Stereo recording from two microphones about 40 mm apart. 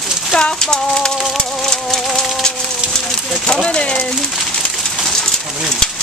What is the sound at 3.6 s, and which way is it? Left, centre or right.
Speech, left.